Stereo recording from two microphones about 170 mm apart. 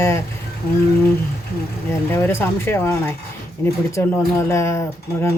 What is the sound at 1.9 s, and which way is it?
Speech, 15° left (ahead or behind).